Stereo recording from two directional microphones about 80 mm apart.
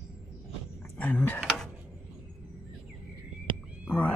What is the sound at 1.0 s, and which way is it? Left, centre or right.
Speech, left.